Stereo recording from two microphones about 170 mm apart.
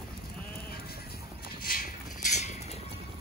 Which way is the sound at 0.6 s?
65° left (ahead or behind).